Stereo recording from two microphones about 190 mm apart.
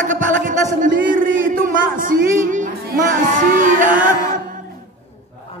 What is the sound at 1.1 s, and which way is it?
Music, 45° right (ahead or behind).